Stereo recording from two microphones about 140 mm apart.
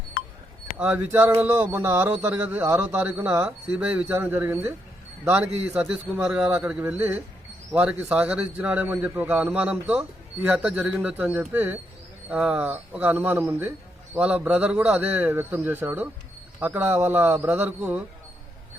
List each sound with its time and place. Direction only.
0.8 s speech: 15° right (ahead or behind)